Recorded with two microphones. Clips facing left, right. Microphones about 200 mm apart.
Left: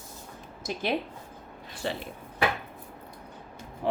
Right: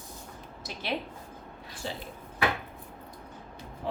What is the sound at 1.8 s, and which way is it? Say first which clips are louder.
Speech: left 5 dB; 65° left (ahead or behind).